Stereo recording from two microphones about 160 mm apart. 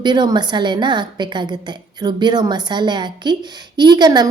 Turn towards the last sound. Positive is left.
turn(degrees=-25)  # may be behind; listen again after turning